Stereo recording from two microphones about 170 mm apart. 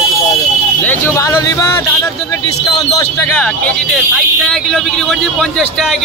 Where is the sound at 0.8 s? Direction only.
15° left (ahead or behind).